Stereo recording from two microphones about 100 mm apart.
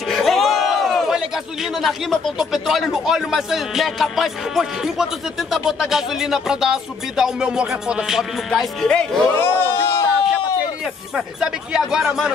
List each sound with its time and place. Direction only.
0.1 s speech: centre (ahead or behind)
9.4 s a sound: 25° left (ahead or behind)
11.1 s speech: 10° right (ahead or behind)